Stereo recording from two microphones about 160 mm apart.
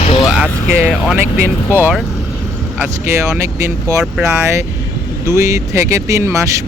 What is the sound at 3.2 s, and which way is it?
Speech, 20° right (ahead or behind).